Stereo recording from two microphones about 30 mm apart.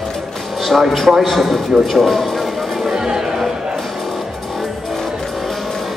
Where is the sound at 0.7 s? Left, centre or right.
Centre.